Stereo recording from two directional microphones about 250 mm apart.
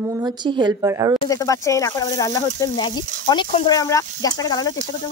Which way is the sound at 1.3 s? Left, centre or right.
Centre.